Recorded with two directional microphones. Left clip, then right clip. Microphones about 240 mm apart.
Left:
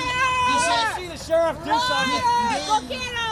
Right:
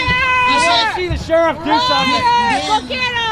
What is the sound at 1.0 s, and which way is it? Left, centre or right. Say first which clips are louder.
Speech: right 7 dB; left.